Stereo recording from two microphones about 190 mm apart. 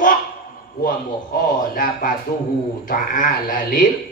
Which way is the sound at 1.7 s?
45° left (ahead or behind).